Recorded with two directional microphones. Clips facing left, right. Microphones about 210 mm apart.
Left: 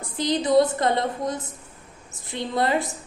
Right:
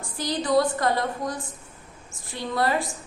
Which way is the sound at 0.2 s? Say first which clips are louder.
Left 3 dB; 20° left (ahead or behind).